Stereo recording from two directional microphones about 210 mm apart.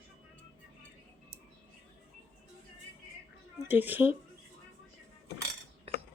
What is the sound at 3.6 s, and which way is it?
Speech, 10° right (ahead or behind).